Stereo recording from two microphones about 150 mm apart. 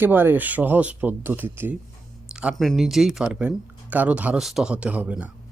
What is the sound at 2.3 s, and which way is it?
Speech, centre (ahead or behind).